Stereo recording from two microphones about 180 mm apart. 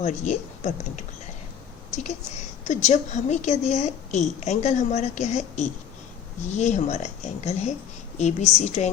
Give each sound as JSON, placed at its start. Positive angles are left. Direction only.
{"t": 0.0, "sound": "a woman's voice", "side_deg": 40}
{"t": 2.6, "sound": "a woman's voice", "side_deg": 40}